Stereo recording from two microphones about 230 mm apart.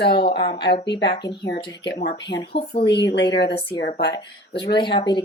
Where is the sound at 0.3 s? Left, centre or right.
Centre.